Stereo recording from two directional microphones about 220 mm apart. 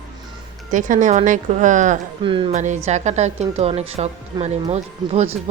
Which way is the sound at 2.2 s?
25° right (ahead or behind).